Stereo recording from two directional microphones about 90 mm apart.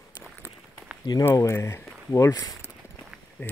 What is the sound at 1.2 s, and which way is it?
Speech, 30° left (ahead or behind).